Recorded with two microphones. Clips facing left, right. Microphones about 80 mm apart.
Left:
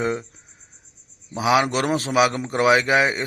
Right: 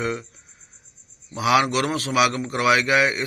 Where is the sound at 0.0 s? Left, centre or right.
Left.